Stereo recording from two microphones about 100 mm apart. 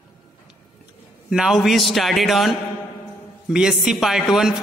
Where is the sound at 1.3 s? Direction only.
5° right (ahead or behind).